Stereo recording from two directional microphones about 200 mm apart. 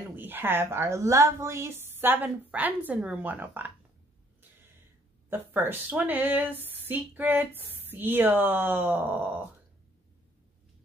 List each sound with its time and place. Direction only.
0.1 s a woman's voice: 10° right (ahead or behind)
5.3 s a woman's voice: 10° right (ahead or behind)